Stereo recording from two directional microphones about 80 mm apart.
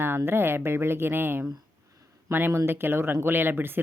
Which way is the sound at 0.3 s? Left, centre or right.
Right.